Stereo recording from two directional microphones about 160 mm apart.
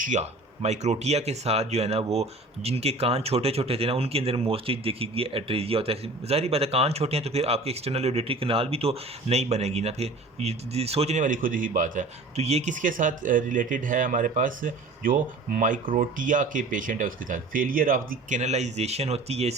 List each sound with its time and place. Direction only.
0.0 s speech: 45° right (ahead or behind)